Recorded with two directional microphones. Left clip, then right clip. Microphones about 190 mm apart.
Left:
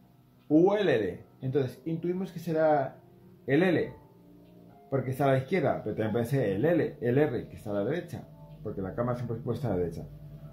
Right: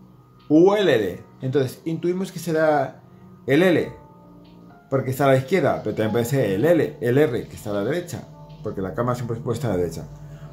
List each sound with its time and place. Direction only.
0.5 s speech: 20° right (ahead or behind)
4.8 s speech: 20° right (ahead or behind)